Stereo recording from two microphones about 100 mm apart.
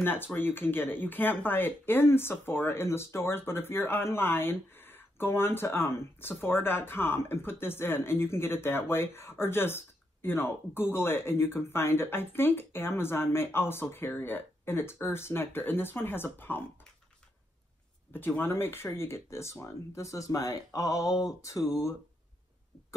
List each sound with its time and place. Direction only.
0.0 s speech: 20° left (ahead or behind)
18.1 s speech: 20° left (ahead or behind)